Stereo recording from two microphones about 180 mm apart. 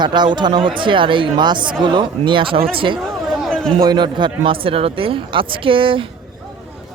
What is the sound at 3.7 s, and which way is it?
Speech, 25° right (ahead or behind).